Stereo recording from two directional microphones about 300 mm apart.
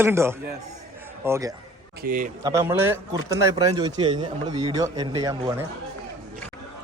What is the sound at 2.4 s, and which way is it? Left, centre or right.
Speech, centre.